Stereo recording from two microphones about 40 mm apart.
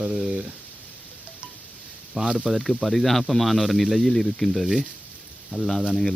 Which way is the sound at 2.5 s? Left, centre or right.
Centre.